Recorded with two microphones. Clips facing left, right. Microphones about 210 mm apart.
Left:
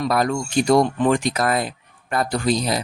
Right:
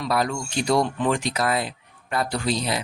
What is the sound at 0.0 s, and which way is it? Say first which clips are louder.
Speech: left 4 dB; 50° left (ahead or behind).